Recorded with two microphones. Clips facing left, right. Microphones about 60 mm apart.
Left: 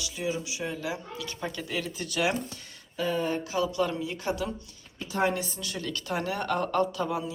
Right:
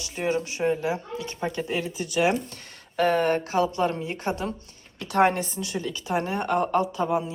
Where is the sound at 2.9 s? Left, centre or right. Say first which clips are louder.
Right 7 dB; right.